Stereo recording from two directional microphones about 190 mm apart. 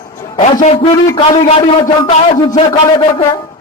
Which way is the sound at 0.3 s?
30° left (ahead or behind).